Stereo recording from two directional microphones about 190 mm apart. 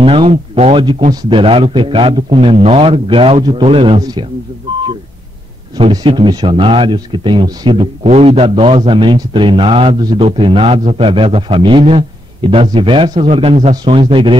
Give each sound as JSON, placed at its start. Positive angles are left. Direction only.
{"t": 0.0, "sound": "speech", "side_deg": -30}
{"t": 5.8, "sound": "speech", "side_deg": -25}